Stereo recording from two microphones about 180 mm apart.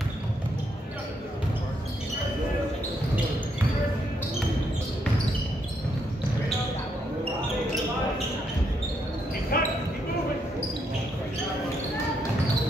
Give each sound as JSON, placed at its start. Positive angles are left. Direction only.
{"t": 9.5, "sound": "basketball bounce", "side_deg": 55}